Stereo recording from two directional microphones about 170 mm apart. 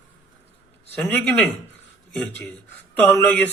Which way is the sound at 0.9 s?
10° left (ahead or behind).